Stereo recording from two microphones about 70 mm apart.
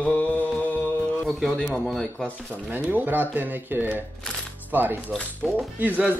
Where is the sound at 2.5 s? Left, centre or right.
Right.